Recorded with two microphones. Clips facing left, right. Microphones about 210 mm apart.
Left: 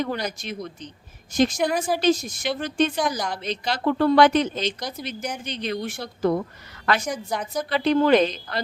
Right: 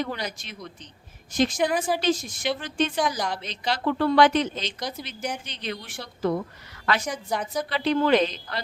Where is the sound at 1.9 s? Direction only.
45° left (ahead or behind).